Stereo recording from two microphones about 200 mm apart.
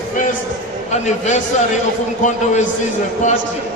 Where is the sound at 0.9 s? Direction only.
35° left (ahead or behind).